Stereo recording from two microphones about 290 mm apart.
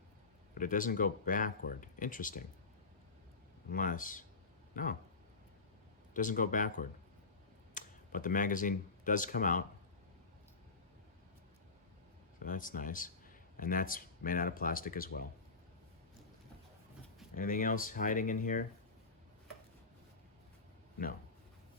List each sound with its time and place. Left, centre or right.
0.6 s speech: left
3.7 s speech: left
6.1 s speech: left
12.4 s speech: left
17.3 s speech: left